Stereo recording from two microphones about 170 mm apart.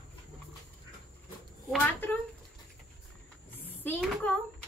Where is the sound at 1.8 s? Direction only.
10° left (ahead or behind).